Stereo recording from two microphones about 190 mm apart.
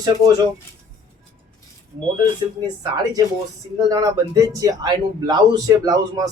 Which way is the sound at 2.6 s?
20° right (ahead or behind).